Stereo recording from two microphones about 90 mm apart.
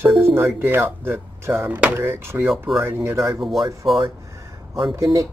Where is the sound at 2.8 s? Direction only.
30° right (ahead or behind).